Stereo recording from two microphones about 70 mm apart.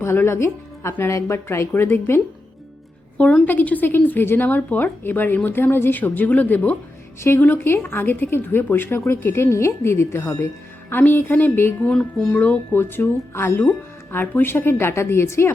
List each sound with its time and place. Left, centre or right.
0.0 s speech: left
3.4 s speech: left
11.9 s speech: centre
12.8 s speech: left